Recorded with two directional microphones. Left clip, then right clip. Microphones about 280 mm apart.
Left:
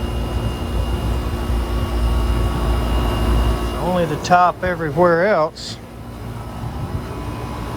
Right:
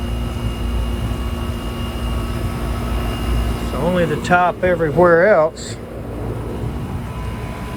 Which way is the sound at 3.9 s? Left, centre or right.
Centre.